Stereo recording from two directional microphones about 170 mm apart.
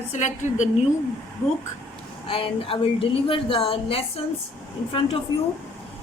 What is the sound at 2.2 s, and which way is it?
A woman's voice, 30° left (ahead or behind).